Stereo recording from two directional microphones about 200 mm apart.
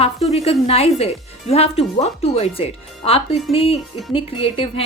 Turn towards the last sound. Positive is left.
turn(degrees=25)  # may be behind; listen again after turning